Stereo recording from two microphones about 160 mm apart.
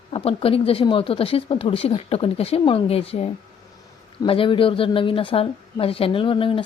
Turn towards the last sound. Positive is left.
turn(degrees=35)  # may be behind; listen again after turning